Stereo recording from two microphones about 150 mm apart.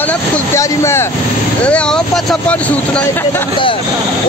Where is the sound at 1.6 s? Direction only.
5° left (ahead or behind).